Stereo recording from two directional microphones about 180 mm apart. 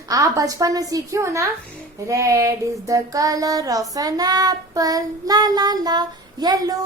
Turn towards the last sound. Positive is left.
turn(degrees=-20)  # may be behind; listen again after turning